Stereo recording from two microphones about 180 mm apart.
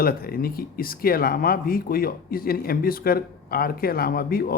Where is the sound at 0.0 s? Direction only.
55° left (ahead or behind).